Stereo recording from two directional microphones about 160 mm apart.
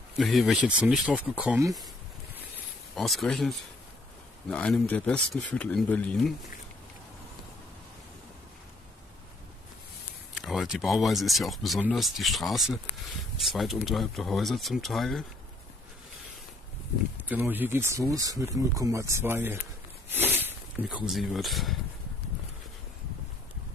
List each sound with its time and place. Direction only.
0.1 s speech: centre (ahead or behind)
3.0 s speech: centre (ahead or behind)
10.4 s speech: centre (ahead or behind)
17.3 s speech: 10° right (ahead or behind)